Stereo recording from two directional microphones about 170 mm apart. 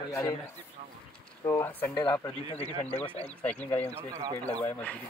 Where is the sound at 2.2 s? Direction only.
35° left (ahead or behind).